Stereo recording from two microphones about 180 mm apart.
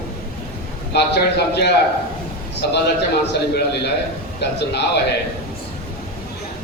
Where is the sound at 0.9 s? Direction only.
65° left (ahead or behind).